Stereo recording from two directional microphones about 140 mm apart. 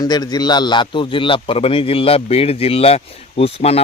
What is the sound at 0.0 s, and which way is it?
Speech, 30° left (ahead or behind).